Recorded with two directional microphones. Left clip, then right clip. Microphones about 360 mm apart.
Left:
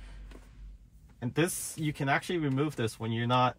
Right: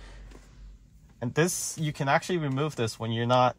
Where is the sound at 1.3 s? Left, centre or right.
Centre.